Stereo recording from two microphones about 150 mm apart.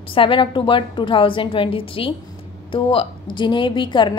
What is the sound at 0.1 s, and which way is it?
A woman's voice, 35° left (ahead or behind).